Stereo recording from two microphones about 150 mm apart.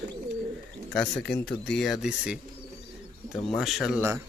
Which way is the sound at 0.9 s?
5° left (ahead or behind).